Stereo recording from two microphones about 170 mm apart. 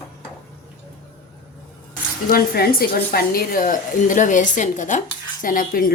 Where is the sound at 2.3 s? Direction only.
60° left (ahead or behind).